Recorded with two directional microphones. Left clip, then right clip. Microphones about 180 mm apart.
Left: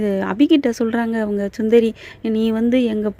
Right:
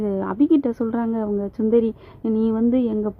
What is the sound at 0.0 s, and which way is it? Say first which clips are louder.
A woman's voice: left 3 dB; 5° left (ahead or behind).